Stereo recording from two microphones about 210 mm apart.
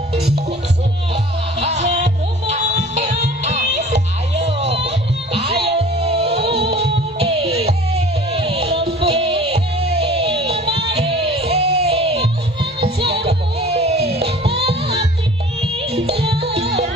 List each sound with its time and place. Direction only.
1.6 s music: 35° right (ahead or behind)